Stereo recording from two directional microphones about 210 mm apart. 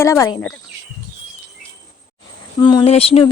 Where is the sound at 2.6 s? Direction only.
20° left (ahead or behind).